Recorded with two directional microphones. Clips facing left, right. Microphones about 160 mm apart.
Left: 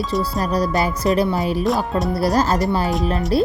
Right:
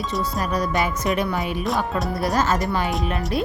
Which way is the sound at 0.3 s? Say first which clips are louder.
Left 3 dB; 35° left (ahead or behind).